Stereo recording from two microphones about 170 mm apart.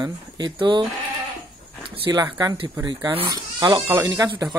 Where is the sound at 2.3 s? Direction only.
25° right (ahead or behind).